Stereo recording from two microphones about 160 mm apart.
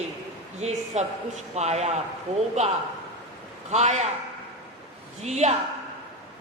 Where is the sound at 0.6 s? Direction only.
45° right (ahead or behind).